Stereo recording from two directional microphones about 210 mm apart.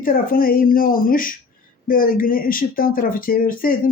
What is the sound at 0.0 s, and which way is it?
Speech, 45° left (ahead or behind).